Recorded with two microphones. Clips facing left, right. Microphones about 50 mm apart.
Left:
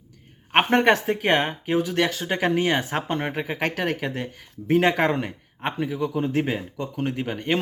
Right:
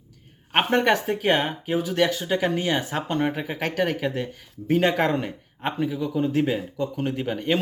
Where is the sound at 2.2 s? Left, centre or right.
Left; by 6.1 s centre.